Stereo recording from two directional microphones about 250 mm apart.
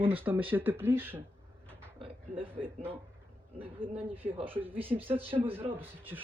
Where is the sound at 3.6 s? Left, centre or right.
Right.